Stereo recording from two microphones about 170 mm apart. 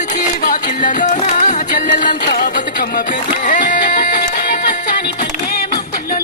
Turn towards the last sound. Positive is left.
turn(degrees=50)  # may be behind; listen again after turning